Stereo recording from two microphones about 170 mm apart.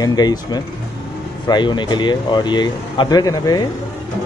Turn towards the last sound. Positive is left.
turn(degrees=25)  # may be behind; listen again after turning